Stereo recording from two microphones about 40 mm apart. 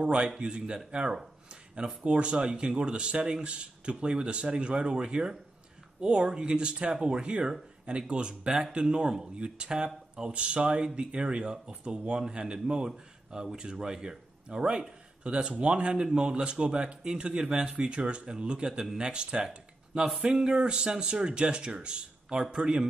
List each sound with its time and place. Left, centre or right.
0.0 s speech: right